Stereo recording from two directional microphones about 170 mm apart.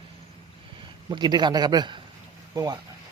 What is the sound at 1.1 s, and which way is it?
Speech, 25° right (ahead or behind).